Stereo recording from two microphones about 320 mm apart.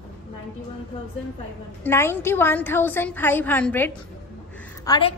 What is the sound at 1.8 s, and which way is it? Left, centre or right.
A woman's voice, centre.